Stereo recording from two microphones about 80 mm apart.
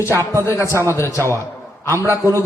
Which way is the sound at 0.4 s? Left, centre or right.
Left.